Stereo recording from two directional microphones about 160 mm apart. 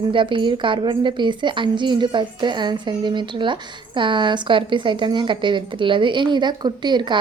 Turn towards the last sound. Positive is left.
turn(degrees=-30)  # may be behind; listen again after turning